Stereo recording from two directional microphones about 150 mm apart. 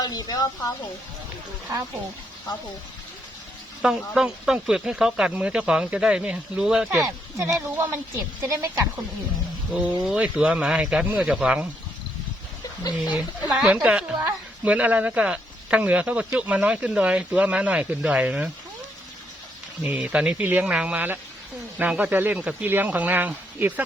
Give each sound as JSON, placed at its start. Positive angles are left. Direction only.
{"t": 0.0, "sound": "speech", "side_deg": 25}
{"t": 3.8, "sound": "speech", "side_deg": -5}
{"t": 7.0, "sound": "a woman's voice", "side_deg": -20}
{"t": 9.7, "sound": "speech", "side_deg": -10}
{"t": 13.1, "sound": "speech", "side_deg": -10}
{"t": 19.8, "sound": "speech", "side_deg": -10}